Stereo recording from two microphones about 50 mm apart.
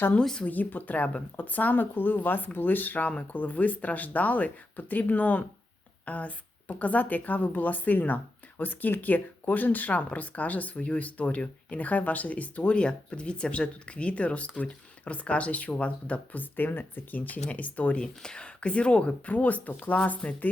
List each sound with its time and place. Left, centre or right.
0.2 s speech: centre
0.4 s a woman's voice: left
18.0 s a woman's voice: centre; by 20.5 s left